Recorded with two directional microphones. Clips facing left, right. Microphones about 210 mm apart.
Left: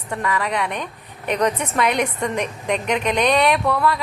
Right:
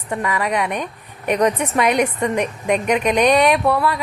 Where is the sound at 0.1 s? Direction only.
15° right (ahead or behind).